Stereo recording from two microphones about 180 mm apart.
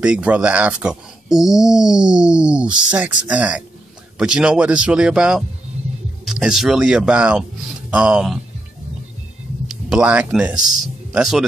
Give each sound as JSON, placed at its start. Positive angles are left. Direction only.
{"t": 0.0, "sound": "speech", "side_deg": -5}
{"t": 9.7, "sound": "speech", "side_deg": -5}